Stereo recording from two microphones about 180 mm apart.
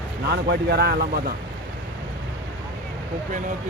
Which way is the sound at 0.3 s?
65° right (ahead or behind).